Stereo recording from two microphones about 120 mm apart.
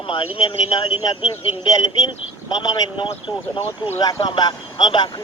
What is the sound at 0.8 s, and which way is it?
A man's voice, 45° left (ahead or behind).